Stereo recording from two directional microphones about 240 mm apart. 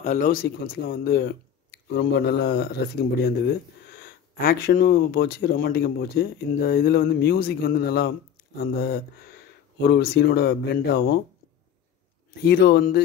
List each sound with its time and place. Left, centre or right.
0.0 s speech: left
3.9 s speech: left
12.4 s speech: left